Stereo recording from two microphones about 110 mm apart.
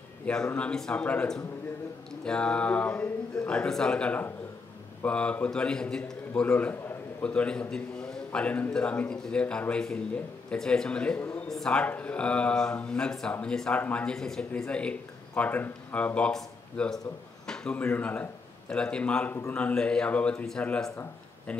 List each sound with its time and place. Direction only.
0.3 s a man's voice: 10° left (ahead or behind)
6.4 s a sound: 20° left (ahead or behind)
7.2 s a man's voice: 10° left (ahead or behind)